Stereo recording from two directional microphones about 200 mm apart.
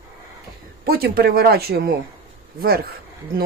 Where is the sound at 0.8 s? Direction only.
50° right (ahead or behind).